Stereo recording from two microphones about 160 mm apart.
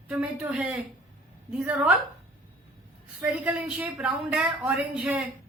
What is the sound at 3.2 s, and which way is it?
Speech, 10° right (ahead or behind).